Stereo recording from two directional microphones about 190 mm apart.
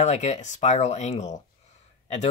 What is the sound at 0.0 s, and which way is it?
Speech, 35° left (ahead or behind).